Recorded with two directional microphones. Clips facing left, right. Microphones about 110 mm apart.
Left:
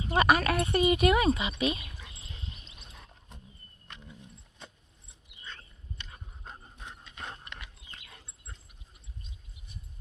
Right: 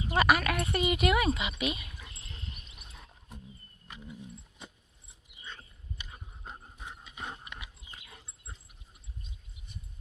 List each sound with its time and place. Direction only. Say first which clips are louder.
0.1 s speech: left 2 dB; 30° left (ahead or behind)
1.9 s dog: even; 5° left (ahead or behind)
2.2 s dog: left 1 dB; 25° left (ahead or behind)
2.9 s roaring cats: right 4 dB; centre (ahead or behind)
3.8 s a sound: right 4 dB; 5° right (ahead or behind)
5.4 s dog: even; 5° right (ahead or behind)